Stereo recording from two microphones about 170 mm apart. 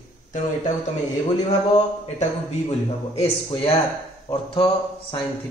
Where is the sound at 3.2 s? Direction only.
35° left (ahead or behind).